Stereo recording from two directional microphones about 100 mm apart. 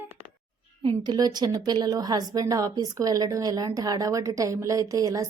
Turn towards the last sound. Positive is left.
turn(degrees=-35)  # may be behind; listen again after turning